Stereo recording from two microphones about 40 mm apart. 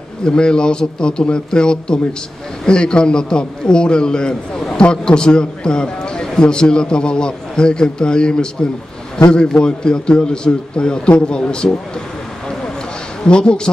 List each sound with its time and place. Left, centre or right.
0.2 s a man's voice: left
13.2 s a man's voice: left